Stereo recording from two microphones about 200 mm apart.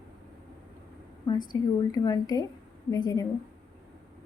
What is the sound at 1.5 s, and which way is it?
A woman's voice, 15° left (ahead or behind).